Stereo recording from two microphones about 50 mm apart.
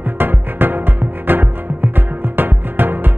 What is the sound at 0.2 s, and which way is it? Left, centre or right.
Music, right.